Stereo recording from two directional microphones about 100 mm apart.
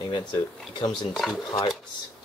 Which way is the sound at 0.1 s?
50° left (ahead or behind).